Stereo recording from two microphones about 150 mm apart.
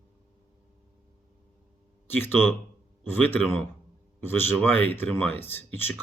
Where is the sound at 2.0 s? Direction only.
15° left (ahead or behind).